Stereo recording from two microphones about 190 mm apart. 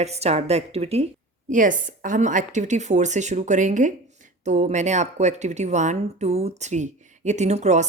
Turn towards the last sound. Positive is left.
turn(degrees=-35)  # may be behind; listen again after turning